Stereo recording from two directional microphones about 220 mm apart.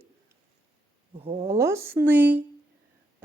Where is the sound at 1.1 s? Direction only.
25° right (ahead or behind).